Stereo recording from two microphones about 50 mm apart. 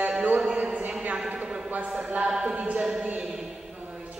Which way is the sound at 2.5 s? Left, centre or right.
Right.